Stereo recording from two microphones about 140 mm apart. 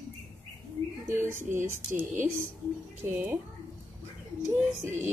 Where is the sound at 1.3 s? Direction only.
65° right (ahead or behind).